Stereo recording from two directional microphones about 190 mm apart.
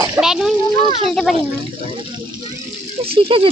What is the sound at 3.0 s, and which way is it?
Speech, 30° right (ahead or behind).